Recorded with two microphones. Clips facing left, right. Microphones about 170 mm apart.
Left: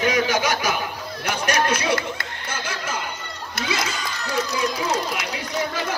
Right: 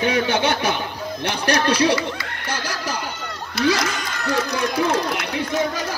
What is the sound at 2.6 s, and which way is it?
Music, 35° right (ahead or behind).